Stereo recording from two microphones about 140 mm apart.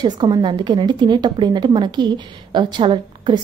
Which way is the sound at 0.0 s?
30° right (ahead or behind).